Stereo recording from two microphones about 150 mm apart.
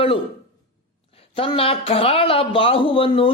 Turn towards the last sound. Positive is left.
turn(degrees=35)  # may be behind; listen again after turning